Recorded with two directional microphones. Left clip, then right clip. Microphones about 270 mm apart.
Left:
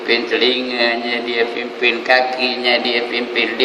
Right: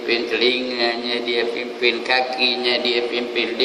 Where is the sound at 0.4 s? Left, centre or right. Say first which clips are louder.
Left 3 dB; centre.